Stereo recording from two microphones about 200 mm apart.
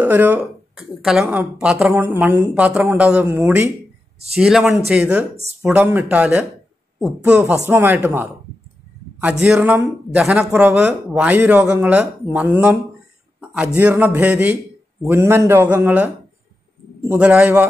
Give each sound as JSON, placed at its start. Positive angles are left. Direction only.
{"t": 0.0, "sound": "speech", "side_deg": -10}
{"t": 4.4, "sound": "a man's voice", "side_deg": 0}
{"t": 13.7, "sound": "speech", "side_deg": -10}
{"t": 17.1, "sound": "speech", "side_deg": -5}